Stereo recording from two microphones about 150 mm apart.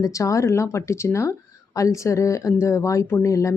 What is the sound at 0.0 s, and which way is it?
Speech, 20° left (ahead or behind).